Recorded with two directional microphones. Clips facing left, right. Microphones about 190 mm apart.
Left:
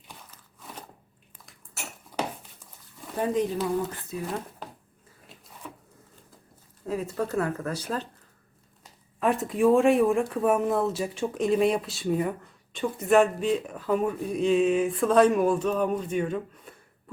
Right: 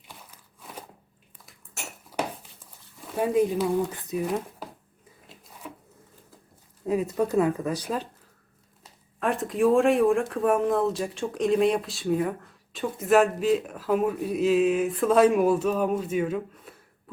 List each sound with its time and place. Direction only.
0.3 s a sound: 10° right (ahead or behind)
3.2 s speech: 10° right (ahead or behind)
6.8 s speech: 15° right (ahead or behind)
9.2 s speech: centre (ahead or behind)